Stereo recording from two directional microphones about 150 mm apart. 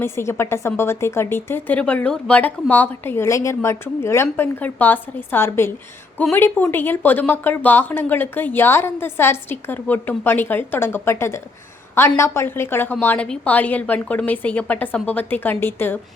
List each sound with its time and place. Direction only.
0.0 s a woman's voice: 15° left (ahead or behind)